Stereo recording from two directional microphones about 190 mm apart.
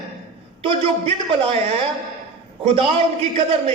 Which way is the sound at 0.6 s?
30° right (ahead or behind).